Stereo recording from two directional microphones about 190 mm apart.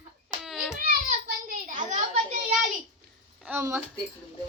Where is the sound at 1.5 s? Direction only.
45° right (ahead or behind).